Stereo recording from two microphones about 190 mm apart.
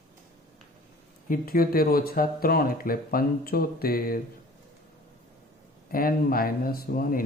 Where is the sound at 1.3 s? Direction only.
50° left (ahead or behind).